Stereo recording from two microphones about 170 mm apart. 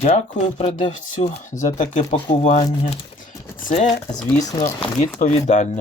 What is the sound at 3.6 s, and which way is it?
Speech, 40° left (ahead or behind).